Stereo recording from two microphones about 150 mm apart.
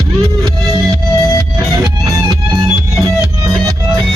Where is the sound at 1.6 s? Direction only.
25° right (ahead or behind).